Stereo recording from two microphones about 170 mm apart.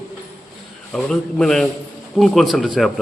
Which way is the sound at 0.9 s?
5° left (ahead or behind).